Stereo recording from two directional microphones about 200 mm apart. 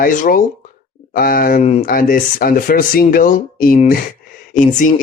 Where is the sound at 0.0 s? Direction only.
40° left (ahead or behind).